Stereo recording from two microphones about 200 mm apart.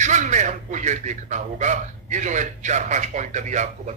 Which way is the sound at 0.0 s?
35° right (ahead or behind).